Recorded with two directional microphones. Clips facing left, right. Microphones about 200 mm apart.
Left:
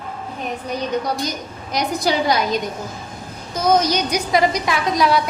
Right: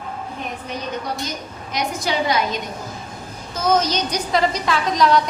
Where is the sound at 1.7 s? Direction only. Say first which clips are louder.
Left 3 dB; 35° left (ahead or behind).